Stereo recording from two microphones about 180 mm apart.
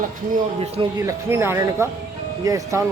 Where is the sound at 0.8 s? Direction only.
20° right (ahead or behind).